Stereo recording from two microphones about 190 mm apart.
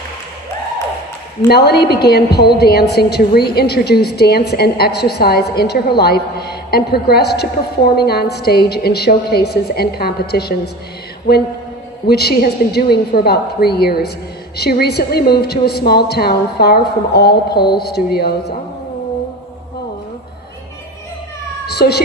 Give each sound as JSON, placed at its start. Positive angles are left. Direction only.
{"t": 1.5, "sound": "a woman's voice", "side_deg": 60}
{"t": 12.1, "sound": "a woman's voice", "side_deg": 55}
{"t": 21.6, "sound": "speech", "side_deg": 60}